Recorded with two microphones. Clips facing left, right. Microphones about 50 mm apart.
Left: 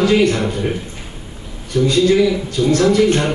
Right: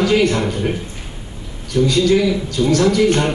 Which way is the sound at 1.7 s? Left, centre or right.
Left.